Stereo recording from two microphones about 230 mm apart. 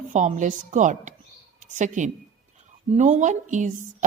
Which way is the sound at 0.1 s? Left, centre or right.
Right.